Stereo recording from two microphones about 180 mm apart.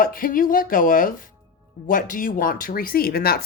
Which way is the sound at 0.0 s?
50° left (ahead or behind).